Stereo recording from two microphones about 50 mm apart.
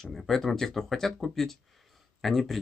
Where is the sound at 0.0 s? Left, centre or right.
Centre.